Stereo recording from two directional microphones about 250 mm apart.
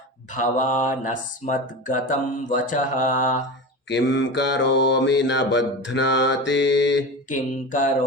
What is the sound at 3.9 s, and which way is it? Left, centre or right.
Mantra, left.